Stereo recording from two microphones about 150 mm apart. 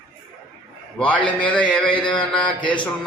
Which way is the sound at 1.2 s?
35° left (ahead or behind).